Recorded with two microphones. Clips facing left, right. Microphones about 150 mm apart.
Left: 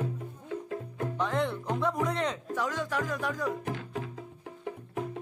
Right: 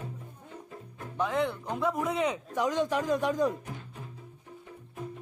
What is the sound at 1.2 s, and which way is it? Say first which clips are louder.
Speech: right 2 dB; centre (ahead or behind).